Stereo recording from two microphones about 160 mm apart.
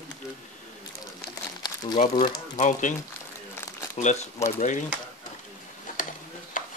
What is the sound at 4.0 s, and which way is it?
Speech, 45° left (ahead or behind).